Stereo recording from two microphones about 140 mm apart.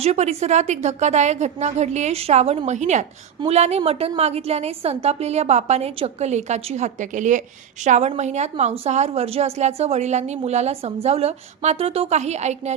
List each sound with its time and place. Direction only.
0.0 s a woman's voice: 50° right (ahead or behind)